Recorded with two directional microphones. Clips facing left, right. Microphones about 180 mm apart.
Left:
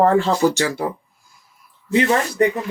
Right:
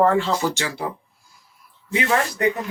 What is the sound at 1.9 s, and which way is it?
Speech, 35° left (ahead or behind).